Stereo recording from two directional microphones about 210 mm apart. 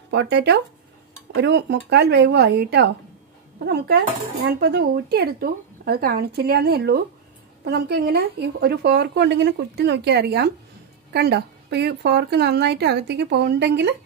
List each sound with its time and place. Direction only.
0.1 s speech: 55° right (ahead or behind)